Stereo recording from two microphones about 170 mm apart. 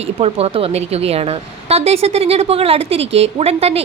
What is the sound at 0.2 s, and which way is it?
A woman's voice, 35° right (ahead or behind).